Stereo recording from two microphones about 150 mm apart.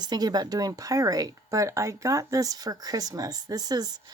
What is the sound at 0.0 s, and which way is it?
Speech, 25° right (ahead or behind).